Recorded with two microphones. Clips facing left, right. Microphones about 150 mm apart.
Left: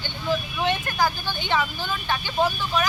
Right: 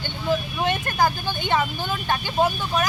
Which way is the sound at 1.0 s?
15° right (ahead or behind).